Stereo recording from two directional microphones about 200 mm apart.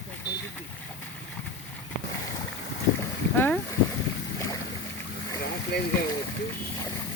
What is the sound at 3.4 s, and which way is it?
Boat, 10° left (ahead or behind).